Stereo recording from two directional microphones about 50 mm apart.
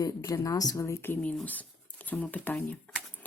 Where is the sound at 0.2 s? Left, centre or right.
Left.